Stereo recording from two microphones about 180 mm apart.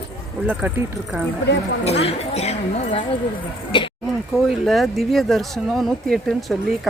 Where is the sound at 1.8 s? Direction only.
35° left (ahead or behind).